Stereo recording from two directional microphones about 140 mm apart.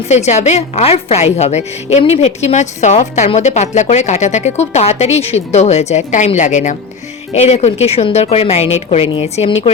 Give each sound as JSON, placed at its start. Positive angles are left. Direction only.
{"t": 0.1, "sound": "speech", "side_deg": 55}